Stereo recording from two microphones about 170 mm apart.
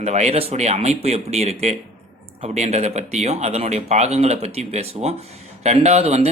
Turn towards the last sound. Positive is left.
turn(degrees=-40)  # may be behind; listen again after turning